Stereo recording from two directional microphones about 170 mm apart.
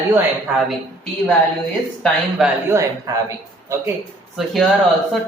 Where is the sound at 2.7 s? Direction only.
20° right (ahead or behind).